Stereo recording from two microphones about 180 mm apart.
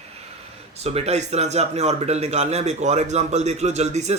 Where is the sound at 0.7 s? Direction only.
35° right (ahead or behind).